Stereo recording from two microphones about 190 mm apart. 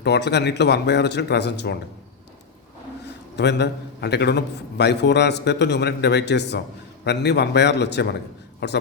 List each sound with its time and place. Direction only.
0.0 s a man's voice: 60° left (ahead or behind)
3.3 s a man's voice: 65° left (ahead or behind)